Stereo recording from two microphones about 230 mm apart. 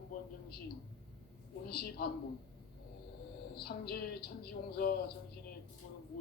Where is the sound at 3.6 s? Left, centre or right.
Left.